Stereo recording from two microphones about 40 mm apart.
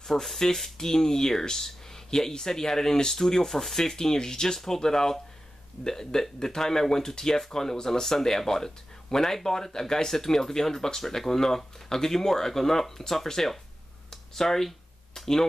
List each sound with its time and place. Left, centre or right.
0.0 s speech: centre